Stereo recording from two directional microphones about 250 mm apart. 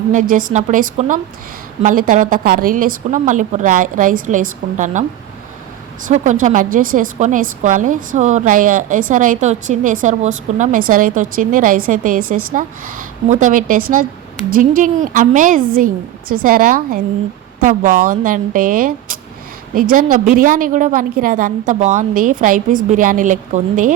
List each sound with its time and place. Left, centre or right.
0.1 s a woman's voice: right
6.1 s a woman's voice: right